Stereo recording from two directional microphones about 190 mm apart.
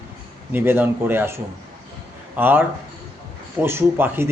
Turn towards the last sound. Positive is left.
turn(degrees=-10)  # may be behind; listen again after turning